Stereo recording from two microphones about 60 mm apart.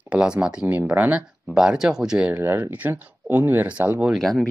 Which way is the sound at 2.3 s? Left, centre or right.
Right.